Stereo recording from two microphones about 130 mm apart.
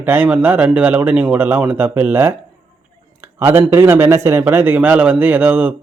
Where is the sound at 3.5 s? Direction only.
15° right (ahead or behind).